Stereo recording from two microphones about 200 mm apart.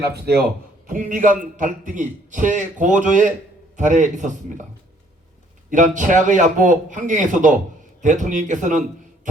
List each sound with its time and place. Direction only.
0.0 s speech: 55° right (ahead or behind)
0.9 s a man's voice: 40° right (ahead or behind)
5.7 s a man's voice: 40° right (ahead or behind)